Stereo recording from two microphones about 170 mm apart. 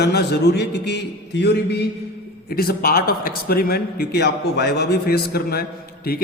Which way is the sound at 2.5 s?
60° left (ahead or behind).